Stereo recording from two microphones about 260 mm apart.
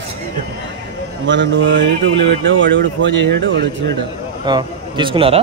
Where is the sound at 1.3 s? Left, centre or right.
Right.